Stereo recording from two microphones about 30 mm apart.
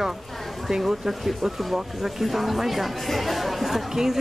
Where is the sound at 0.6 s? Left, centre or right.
Centre.